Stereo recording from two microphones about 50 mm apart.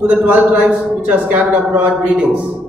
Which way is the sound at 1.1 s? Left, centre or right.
Right.